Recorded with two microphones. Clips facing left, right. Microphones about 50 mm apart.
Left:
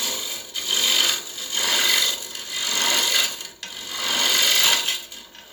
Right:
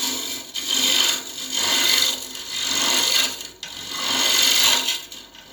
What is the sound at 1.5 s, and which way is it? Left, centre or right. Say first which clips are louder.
Sewing machine: even; centre.